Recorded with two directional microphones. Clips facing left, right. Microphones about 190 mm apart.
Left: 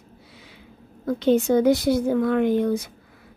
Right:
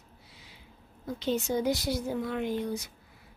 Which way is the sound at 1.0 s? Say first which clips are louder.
Left 11 dB; 60° left (ahead or behind).